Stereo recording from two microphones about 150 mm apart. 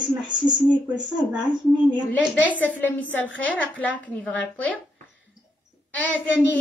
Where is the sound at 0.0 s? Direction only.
30° right (ahead or behind).